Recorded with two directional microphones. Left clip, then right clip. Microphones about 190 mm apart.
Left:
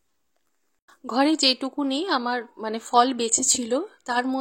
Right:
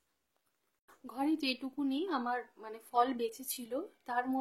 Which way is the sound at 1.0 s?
40° left (ahead or behind).